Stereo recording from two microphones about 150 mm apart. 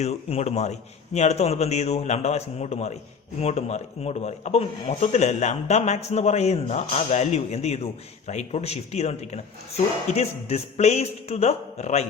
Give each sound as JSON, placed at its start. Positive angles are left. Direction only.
{"t": 0.0, "sound": "a man's voice", "side_deg": 45}